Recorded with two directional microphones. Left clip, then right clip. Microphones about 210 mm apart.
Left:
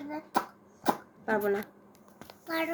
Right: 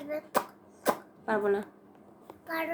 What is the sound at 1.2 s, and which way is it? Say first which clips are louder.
A child's voice: right 1 dB; 5° right (ahead or behind).